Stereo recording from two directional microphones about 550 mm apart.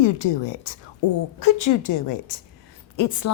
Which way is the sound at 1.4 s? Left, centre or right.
Left.